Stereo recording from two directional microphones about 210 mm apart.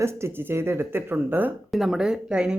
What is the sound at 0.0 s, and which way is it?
Speech, 10° right (ahead or behind).